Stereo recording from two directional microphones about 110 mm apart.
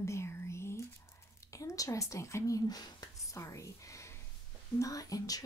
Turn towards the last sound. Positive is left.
turn(degrees=35)  # may be behind; listen again after turning